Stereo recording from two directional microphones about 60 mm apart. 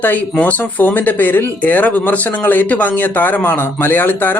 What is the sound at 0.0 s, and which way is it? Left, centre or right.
Speech, left.